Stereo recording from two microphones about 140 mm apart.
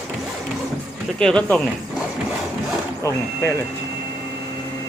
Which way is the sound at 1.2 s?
5° left (ahead or behind).